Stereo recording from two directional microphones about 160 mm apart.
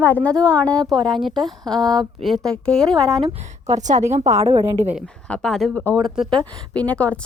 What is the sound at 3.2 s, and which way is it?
A woman's voice, 40° right (ahead or behind).